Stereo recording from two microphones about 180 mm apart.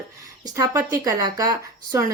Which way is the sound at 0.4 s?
20° right (ahead or behind).